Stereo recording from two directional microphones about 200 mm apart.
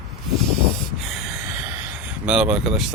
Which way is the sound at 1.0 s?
Centre (ahead or behind).